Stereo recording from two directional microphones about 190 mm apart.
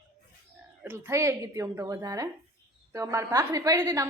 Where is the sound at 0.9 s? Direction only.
15° right (ahead or behind).